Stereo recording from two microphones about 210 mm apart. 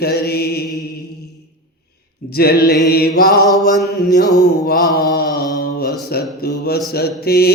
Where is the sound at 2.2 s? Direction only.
50° left (ahead or behind).